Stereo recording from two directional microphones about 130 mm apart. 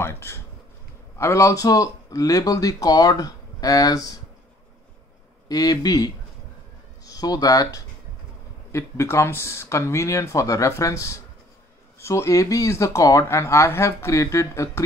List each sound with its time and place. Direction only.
0.0 s speech: 20° left (ahead or behind)
5.5 s speech: 30° left (ahead or behind)